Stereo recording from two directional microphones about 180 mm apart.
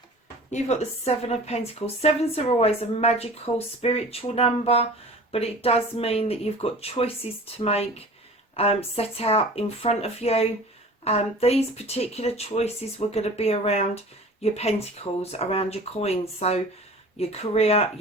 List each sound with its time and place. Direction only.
0.5 s a woman's voice: 40° left (ahead or behind)